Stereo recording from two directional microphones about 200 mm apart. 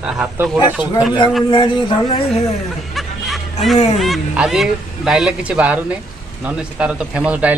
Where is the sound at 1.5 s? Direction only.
25° left (ahead or behind).